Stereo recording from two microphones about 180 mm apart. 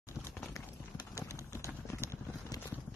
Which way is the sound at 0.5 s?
20° left (ahead or behind).